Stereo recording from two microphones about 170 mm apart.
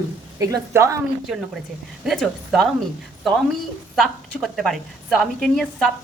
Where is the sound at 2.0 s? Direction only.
Centre (ahead or behind).